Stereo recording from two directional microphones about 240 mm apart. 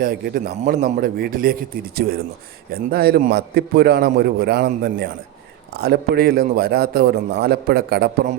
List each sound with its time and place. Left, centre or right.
0.0 s a man's voice: right